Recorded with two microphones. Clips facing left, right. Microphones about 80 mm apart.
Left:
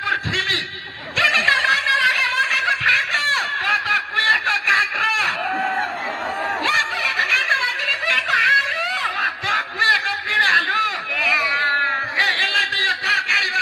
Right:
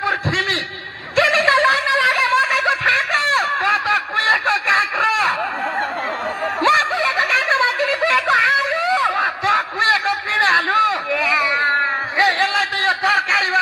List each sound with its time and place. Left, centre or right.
0.0 s chuckle: right
1.1 s snicker: right
6.6 s snicker: right